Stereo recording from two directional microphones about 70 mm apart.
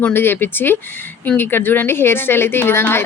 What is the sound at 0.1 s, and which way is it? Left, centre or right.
A woman's voice, left.